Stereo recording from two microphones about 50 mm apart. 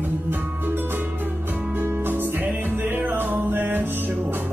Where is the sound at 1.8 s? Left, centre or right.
Right.